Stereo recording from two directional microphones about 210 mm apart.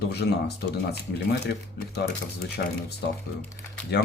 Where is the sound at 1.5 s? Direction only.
50° left (ahead or behind).